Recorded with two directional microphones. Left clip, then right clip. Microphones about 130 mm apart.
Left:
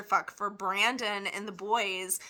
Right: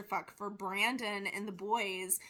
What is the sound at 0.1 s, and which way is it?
Speech, 20° right (ahead or behind).